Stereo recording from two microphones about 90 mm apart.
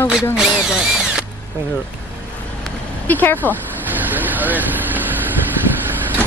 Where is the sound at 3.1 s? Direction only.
20° left (ahead or behind).